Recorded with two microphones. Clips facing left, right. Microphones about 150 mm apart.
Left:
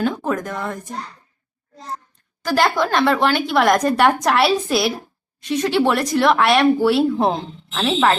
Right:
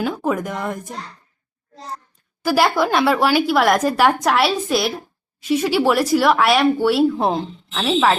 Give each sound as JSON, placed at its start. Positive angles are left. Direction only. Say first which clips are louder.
{"t": 0.0, "sound": "speech", "louder": "even", "side_deg": -10}
{"t": 2.4, "sound": "speech", "louder": "right 1 dB", "side_deg": -10}